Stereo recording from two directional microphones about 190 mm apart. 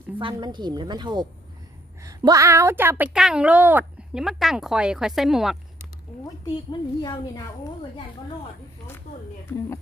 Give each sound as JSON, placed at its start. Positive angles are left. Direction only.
{"t": 0.2, "sound": "a woman's voice", "side_deg": -25}
{"t": 6.7, "sound": "a woman's voice", "side_deg": 20}
{"t": 9.5, "sound": "a woman's voice", "side_deg": 20}